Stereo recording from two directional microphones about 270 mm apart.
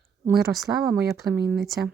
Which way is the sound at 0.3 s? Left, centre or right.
Centre.